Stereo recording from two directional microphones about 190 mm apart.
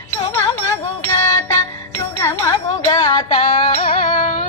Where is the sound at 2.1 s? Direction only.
15° left (ahead or behind).